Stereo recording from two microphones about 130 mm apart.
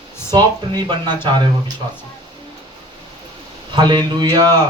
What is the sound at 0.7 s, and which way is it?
Speech, 35° right (ahead or behind).